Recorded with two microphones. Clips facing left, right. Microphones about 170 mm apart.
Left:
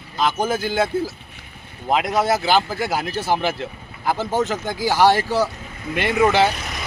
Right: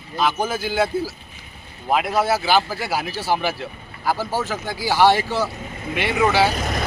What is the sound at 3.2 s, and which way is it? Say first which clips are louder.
Speech: left 2 dB; 20° left (ahead or behind).